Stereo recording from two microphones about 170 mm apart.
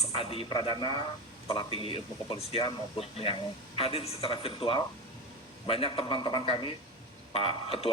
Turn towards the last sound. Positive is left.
turn(degrees=35)  # may be behind; listen again after turning